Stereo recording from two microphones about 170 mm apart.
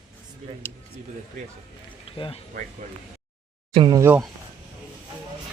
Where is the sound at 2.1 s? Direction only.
30° left (ahead or behind).